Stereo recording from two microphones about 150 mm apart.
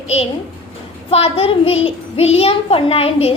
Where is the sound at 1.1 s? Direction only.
40° left (ahead or behind).